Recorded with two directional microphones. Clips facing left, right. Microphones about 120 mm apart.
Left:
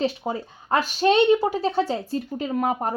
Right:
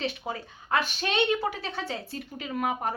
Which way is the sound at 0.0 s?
35° left (ahead or behind).